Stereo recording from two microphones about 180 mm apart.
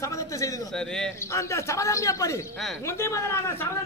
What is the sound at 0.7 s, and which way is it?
Speech, 5° left (ahead or behind).